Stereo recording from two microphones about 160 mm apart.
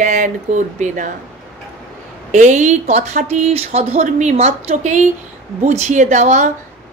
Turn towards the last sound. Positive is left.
turn(degrees=-50)  # may be behind; listen again after turning